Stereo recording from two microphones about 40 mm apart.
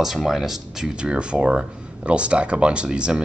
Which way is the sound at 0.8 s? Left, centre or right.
Right.